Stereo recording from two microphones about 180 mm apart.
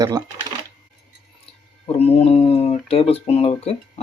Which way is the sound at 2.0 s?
35° left (ahead or behind).